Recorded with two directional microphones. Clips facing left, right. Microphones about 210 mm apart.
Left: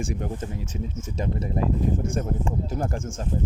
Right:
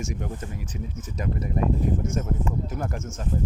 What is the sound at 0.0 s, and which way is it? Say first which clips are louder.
Speech: left 3 dB; 30° left (ahead or behind).